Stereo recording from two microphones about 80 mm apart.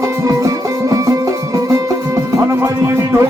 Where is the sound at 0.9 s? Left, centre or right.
Right.